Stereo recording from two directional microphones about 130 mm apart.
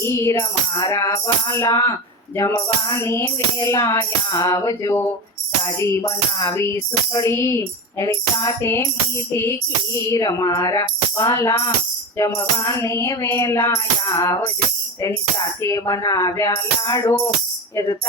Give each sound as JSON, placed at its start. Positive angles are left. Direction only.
{"t": 0.0, "sound": "music", "side_deg": 20}